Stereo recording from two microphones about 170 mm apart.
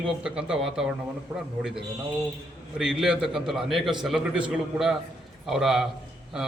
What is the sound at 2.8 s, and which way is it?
A man's voice, 5° right (ahead or behind).